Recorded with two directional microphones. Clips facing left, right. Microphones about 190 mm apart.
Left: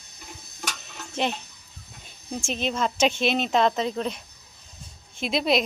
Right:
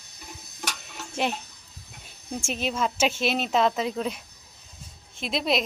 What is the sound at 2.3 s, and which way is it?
Speech, 10° right (ahead or behind).